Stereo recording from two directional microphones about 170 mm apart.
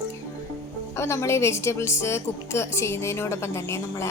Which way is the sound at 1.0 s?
15° left (ahead or behind).